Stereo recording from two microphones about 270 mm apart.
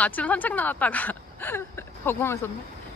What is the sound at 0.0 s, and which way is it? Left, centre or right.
Speech, centre.